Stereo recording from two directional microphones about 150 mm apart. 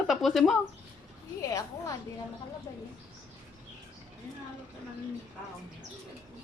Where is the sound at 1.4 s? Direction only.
20° left (ahead or behind).